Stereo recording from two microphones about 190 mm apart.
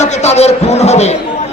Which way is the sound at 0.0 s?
35° left (ahead or behind).